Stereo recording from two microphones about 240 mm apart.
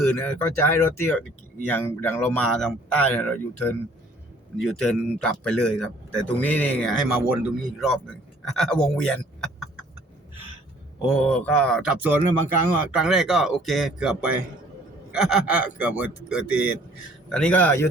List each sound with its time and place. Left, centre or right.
0.0 s speech: centre
11.0 s speech: centre